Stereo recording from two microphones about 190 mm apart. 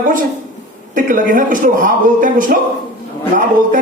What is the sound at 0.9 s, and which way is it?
A man's voice, 45° right (ahead or behind).